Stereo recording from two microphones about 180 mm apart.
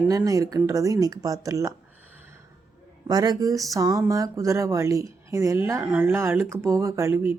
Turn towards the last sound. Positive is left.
turn(degrees=-15)  # may be behind; listen again after turning